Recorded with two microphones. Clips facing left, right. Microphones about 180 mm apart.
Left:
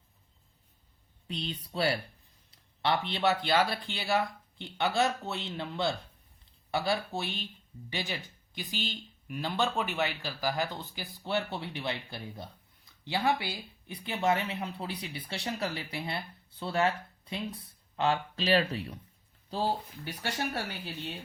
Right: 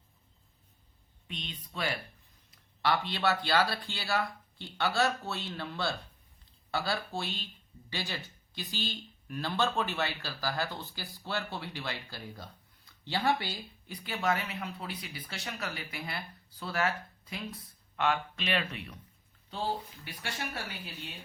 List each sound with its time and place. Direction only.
1.3 s speech: 35° left (ahead or behind)
2.8 s speech: 20° left (ahead or behind)
20.1 s speech: 40° left (ahead or behind)